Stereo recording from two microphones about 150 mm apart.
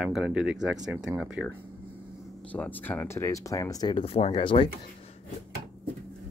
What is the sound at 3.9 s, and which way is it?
Speech, 40° left (ahead or behind).